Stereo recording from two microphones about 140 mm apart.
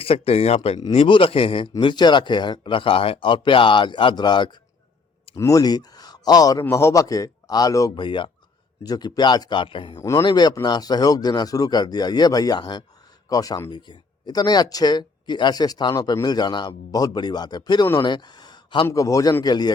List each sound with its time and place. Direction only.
0.0 s a man's voice: 45° left (ahead or behind); by 8.0 s 25° left (ahead or behind)
8.0 s speech: 35° left (ahead or behind)
10.0 s speech: 20° left (ahead or behind)